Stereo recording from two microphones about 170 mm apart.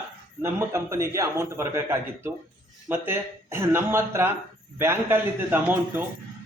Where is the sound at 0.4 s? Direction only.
15° right (ahead or behind).